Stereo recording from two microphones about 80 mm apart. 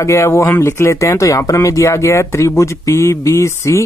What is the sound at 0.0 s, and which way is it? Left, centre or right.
Speech, left.